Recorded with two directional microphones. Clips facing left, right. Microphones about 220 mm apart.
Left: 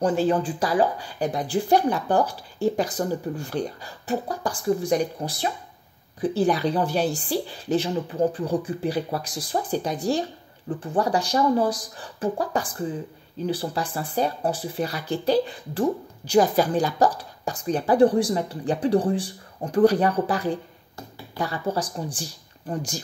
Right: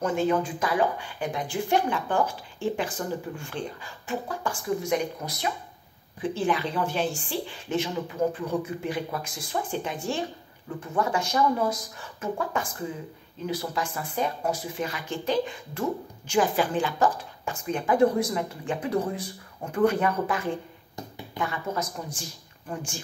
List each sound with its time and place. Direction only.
0.0 s speech: 35° left (ahead or behind)